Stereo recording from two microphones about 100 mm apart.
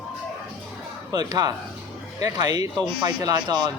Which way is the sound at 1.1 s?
40° right (ahead or behind).